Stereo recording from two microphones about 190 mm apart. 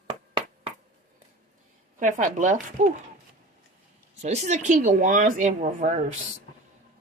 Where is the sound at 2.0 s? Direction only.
40° right (ahead or behind).